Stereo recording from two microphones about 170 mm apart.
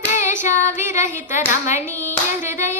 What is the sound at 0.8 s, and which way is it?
Child singing, 15° right (ahead or behind).